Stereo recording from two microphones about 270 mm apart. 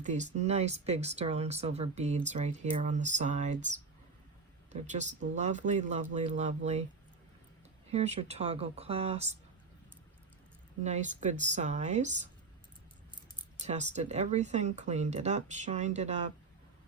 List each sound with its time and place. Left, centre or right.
0.0 s speech: right
4.7 s speech: right
7.9 s speech: right
10.8 s speech: right
13.7 s speech: right